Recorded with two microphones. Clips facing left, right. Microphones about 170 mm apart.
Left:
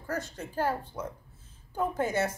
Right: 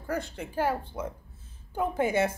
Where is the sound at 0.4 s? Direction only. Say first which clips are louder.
Right 1 dB; 10° right (ahead or behind).